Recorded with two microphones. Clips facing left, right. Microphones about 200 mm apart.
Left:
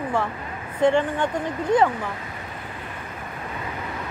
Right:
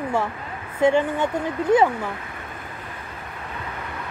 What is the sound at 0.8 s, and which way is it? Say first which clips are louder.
Speech: right 1 dB; 10° right (ahead or behind).